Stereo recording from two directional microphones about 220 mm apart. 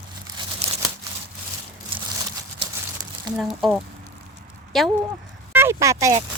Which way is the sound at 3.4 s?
Centre (ahead or behind).